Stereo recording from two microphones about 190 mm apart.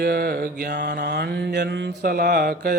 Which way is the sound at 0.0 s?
55° right (ahead or behind).